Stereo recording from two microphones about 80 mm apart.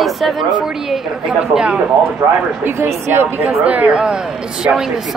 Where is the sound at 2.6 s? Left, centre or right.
Right.